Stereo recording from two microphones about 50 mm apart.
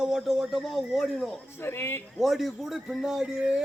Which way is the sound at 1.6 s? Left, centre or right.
Left.